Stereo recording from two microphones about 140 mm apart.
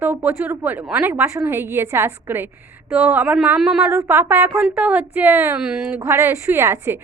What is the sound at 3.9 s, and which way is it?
A woman's voice, 20° right (ahead or behind).